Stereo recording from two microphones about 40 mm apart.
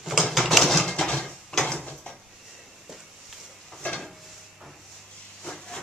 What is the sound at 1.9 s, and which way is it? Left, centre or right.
Dishes, centre.